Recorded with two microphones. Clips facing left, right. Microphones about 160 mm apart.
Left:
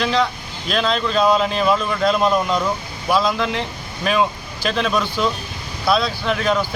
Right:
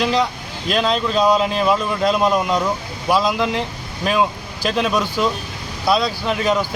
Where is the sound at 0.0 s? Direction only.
5° right (ahead or behind).